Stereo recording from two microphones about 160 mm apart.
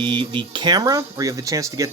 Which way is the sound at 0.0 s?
30° right (ahead or behind).